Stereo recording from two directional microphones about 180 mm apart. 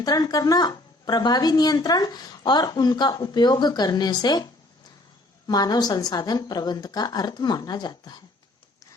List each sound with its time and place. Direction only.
0.0 s speech: 20° left (ahead or behind)
5.5 s speech: 20° left (ahead or behind)